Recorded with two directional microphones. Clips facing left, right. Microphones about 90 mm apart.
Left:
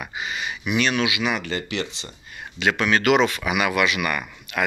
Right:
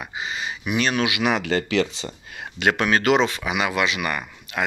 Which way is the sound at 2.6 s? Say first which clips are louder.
Right 1 dB; 45° right (ahead or behind).